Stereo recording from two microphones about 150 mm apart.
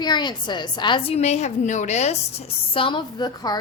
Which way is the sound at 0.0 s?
30° left (ahead or behind).